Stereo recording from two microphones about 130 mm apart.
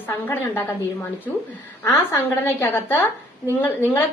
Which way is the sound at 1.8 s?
15° left (ahead or behind).